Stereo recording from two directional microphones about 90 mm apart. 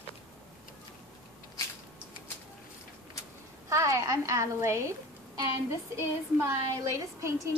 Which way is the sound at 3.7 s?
35° right (ahead or behind).